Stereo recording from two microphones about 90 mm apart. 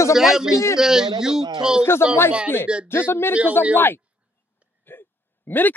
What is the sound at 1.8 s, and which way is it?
Speech, 25° left (ahead or behind).